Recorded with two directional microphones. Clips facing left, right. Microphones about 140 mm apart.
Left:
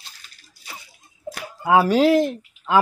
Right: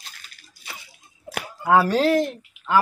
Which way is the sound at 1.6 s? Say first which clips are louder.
Left 2 dB; 10° left (ahead or behind).